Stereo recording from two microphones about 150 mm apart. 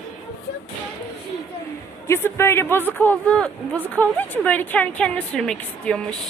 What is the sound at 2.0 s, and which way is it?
A woman's voice, 15° left (ahead or behind).